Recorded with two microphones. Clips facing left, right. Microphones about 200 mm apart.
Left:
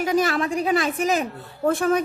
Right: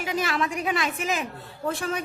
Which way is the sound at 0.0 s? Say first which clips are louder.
Left 6 dB; 45° left (ahead or behind).